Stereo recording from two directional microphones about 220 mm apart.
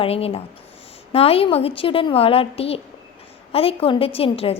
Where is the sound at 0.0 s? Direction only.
25° left (ahead or behind).